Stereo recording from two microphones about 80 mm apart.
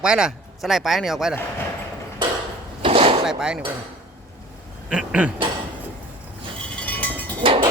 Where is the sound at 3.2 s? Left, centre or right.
Centre.